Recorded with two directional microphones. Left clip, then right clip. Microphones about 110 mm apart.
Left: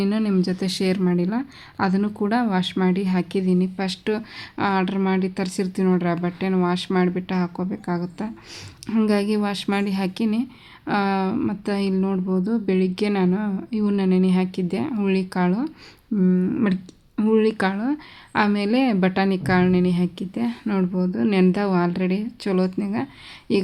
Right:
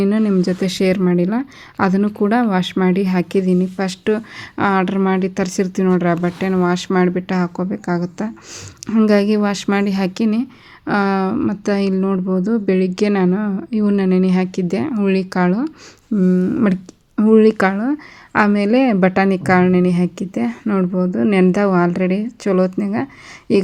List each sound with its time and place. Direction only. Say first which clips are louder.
0.0 s speech: right 6 dB; 30° right (ahead or behind)
16.4 s speech: right 5 dB; 20° right (ahead or behind)
17.2 s speech: right 7 dB; 40° right (ahead or behind)